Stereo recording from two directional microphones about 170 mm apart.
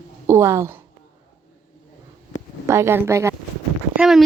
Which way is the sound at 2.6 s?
15° right (ahead or behind).